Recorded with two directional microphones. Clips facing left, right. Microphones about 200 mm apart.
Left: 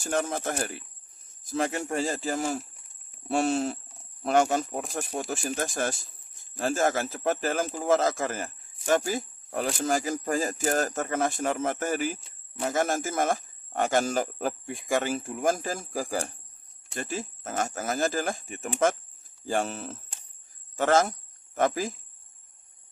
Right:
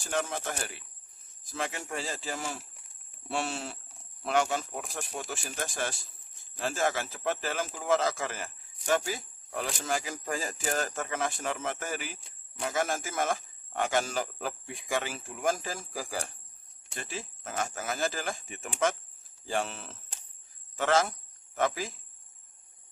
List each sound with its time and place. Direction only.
0.0 s speech: 45° left (ahead or behind)